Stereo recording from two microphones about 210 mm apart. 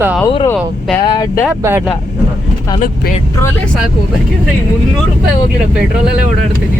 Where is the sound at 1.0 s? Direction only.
15° left (ahead or behind).